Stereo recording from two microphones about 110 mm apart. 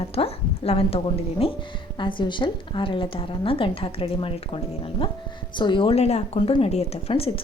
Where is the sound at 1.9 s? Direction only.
45° left (ahead or behind).